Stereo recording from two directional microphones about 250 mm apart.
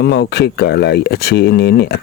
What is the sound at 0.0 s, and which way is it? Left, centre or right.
Speech, left.